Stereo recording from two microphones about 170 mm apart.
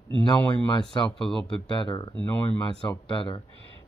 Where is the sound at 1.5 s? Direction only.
25° left (ahead or behind).